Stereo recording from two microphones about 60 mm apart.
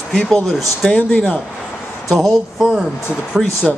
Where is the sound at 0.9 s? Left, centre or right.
Centre.